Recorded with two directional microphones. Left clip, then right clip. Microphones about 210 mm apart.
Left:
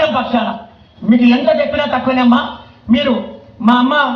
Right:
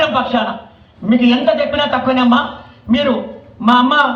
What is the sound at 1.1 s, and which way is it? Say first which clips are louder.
A man's voice: left 1 dB; 30° left (ahead or behind).